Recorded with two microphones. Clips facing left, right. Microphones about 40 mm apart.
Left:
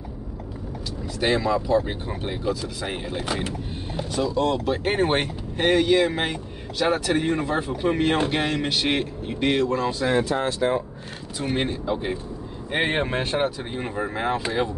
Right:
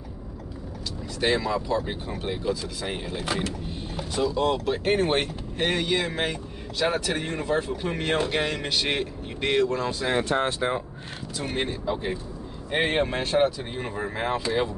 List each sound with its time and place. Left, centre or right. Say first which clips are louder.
1.2 s speech: left 2 dB; centre
4.1 s speech: left 1 dB; centre
4.8 s speech: even; centre
10.6 s speech: left 4 dB; centre
11.3 s speech: left 4 dB; centre
13.7 s speech: left 2 dB; centre